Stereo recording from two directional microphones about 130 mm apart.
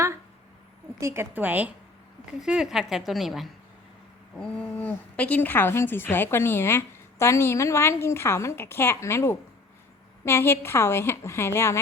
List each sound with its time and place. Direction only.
0.9 s a woman's voice: 20° right (ahead or behind); by 11.8 s 20° left (ahead or behind)